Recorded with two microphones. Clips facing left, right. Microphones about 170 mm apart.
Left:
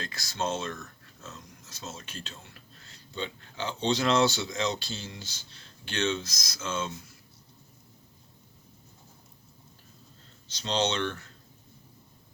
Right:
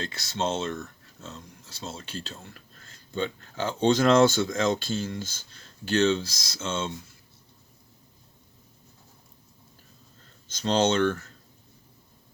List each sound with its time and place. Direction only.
0.0 s speech: 25° right (ahead or behind)
2.3 s speech: 45° right (ahead or behind); by 6.9 s 25° right (ahead or behind)
10.5 s speech: 45° right (ahead or behind)